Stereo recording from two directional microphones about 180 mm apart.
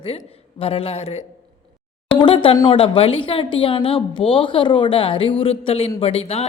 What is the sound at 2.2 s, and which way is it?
A woman's voice, 30° left (ahead or behind).